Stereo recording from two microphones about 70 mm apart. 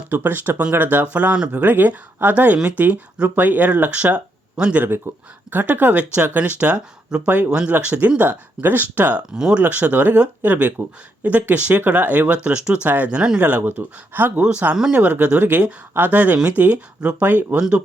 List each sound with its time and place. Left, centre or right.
0.1 s speech: right
5.1 s speech: right
9.3 s speech: centre
13.7 s speech: right
14.4 s speech: centre